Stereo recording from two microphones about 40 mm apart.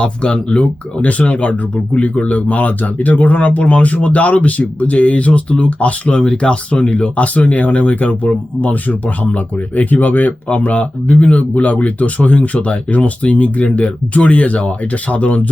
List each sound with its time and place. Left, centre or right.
0.0 s speech: left
0.6 s speech: left
7.2 s speech: left